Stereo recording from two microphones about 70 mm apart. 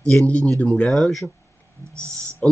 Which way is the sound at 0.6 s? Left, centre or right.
Centre.